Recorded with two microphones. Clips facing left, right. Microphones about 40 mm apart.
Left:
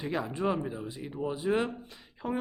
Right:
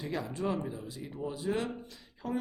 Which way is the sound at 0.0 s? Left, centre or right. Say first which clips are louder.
Left 4 dB; left.